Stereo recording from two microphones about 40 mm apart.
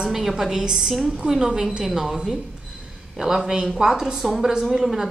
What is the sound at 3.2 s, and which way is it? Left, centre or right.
A woman's voice, centre.